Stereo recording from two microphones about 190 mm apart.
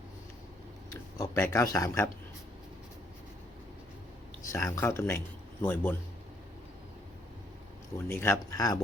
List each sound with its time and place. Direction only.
1.2 s speech: 15° left (ahead or behind)
4.5 s speech: 15° left (ahead or behind)
7.9 s speech: 10° left (ahead or behind)